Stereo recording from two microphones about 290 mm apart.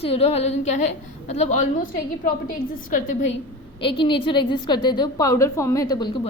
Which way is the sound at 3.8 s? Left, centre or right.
Centre.